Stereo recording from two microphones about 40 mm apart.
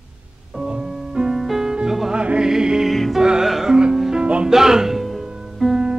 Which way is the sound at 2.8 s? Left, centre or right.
Centre.